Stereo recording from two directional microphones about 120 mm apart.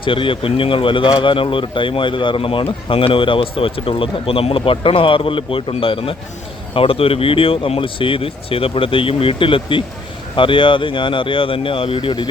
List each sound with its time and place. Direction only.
0.0 s speech: 45° left (ahead or behind)